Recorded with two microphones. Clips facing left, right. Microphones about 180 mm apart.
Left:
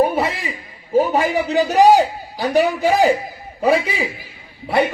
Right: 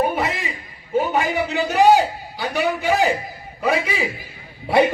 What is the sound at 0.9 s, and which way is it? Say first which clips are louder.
A man's voice: left 4 dB; 35° left (ahead or behind).